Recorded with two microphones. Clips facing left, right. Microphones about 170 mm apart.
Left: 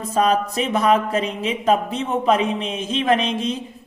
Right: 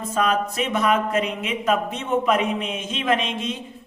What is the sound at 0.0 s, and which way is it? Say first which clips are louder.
Speech: left 3 dB; 35° left (ahead or behind).